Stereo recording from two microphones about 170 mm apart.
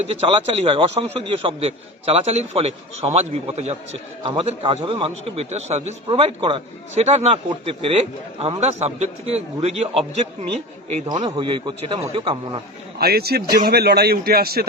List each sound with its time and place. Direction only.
0.0 s a man's voice: 35° right (ahead or behind)
13.0 s a man's voice: 65° right (ahead or behind)